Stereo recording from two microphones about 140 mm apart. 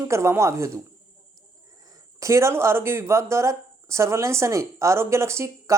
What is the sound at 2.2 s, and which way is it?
Speech, 20° right (ahead or behind).